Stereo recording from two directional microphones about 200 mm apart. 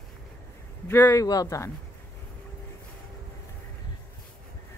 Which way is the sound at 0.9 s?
15° left (ahead or behind).